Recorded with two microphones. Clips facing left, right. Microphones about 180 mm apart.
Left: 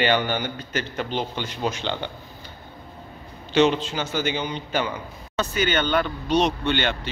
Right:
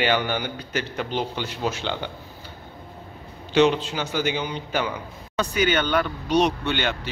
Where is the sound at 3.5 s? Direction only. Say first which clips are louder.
Even; 10° right (ahead or behind).